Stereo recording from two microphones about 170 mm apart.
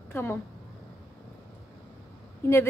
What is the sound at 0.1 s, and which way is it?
Speech, 10° left (ahead or behind).